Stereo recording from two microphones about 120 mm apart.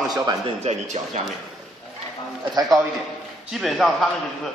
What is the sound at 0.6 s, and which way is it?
Speech, 70° right (ahead or behind).